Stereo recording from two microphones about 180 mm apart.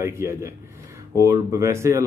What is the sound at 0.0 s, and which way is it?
Speech, 15° right (ahead or behind).